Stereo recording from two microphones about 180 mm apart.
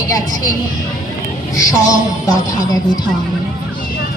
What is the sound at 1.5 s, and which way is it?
Music, 20° left (ahead or behind).